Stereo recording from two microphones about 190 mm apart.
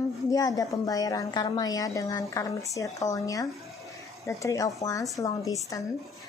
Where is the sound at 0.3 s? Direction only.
20° left (ahead or behind).